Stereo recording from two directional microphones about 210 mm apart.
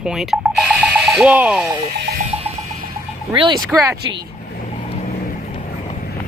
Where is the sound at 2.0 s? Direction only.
50° right (ahead or behind).